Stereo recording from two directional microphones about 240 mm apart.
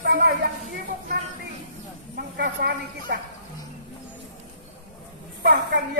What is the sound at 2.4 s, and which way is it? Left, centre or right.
Speech, right.